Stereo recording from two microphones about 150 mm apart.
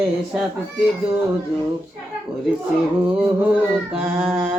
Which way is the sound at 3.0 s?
10° right (ahead or behind).